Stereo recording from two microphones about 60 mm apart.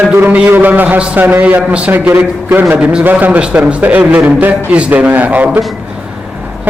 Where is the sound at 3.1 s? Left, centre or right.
Right.